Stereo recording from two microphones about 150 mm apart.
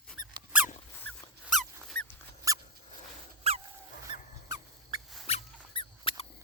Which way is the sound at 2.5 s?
20° right (ahead or behind).